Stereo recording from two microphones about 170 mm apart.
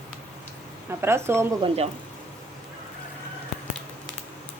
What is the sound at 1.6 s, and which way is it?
Speech, 35° right (ahead or behind).